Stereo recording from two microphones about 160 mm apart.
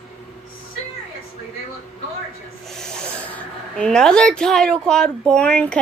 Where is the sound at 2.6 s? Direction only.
5° left (ahead or behind).